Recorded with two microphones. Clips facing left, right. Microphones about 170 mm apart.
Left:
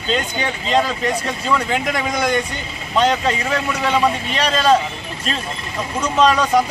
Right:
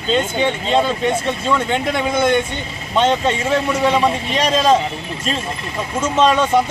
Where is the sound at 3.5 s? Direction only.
30° right (ahead or behind).